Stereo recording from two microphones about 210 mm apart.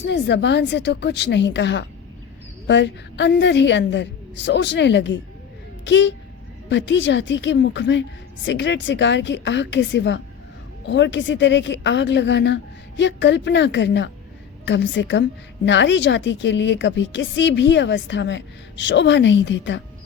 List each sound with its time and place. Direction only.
0.0 s a woman's voice: 55° left (ahead or behind)